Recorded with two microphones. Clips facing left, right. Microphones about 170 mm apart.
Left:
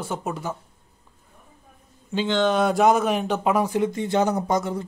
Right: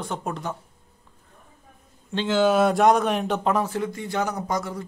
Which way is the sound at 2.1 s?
5° right (ahead or behind).